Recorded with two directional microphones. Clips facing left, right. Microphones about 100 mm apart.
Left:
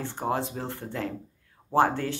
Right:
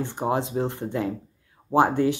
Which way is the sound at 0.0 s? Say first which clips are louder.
Right 4 dB; 15° right (ahead or behind).